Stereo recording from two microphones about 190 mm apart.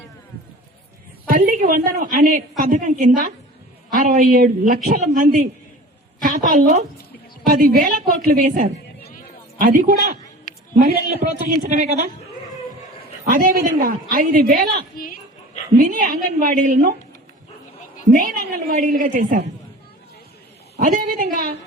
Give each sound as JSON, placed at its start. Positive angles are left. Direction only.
{"t": 1.5, "sound": "a woman's voice", "side_deg": -45}
{"t": 13.3, "sound": "a woman's voice", "side_deg": -50}
{"t": 14.9, "sound": "dog", "side_deg": 50}
{"t": 15.8, "sound": "a woman's voice", "side_deg": -45}
{"t": 18.0, "sound": "a woman's voice", "side_deg": -45}
{"t": 20.7, "sound": "a woman's voice", "side_deg": -50}